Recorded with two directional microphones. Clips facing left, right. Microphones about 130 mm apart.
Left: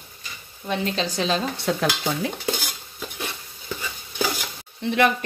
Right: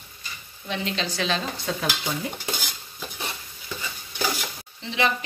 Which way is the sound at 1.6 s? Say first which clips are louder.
Left 5 dB; 75° left (ahead or behind).